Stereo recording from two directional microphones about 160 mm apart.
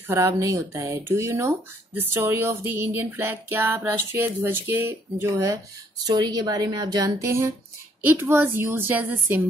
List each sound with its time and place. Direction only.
0.1 s speech: 20° right (ahead or behind)